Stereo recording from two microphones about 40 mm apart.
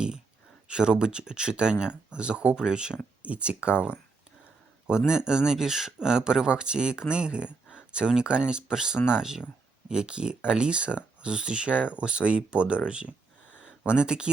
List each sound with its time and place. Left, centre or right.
0.7 s speech: right
3.2 s speech: right